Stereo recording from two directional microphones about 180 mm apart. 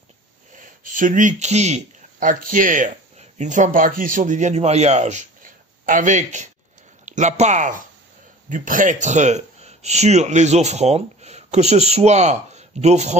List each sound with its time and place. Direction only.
0.6 s speech: 45° right (ahead or behind)